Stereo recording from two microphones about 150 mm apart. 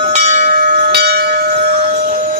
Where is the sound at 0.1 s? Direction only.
55° right (ahead or behind); by 1.5 s 90° right.